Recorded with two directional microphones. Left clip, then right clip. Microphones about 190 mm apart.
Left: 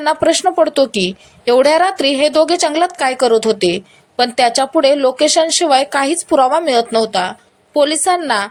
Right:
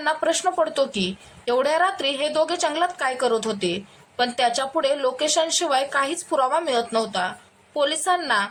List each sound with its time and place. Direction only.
0.0 s a woman's voice: 30° left (ahead or behind)